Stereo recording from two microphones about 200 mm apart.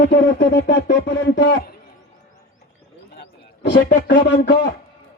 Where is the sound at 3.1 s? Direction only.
55° left (ahead or behind).